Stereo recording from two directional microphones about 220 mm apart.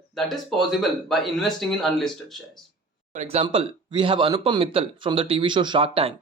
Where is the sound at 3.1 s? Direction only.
30° right (ahead or behind).